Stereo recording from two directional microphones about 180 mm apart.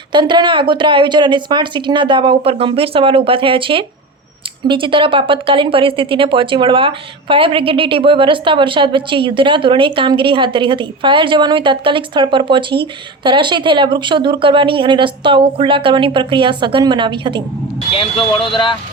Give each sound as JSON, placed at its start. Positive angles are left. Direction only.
{"t": 0.1, "sound": "speech", "side_deg": -25}
{"t": 17.9, "sound": "speech", "side_deg": 30}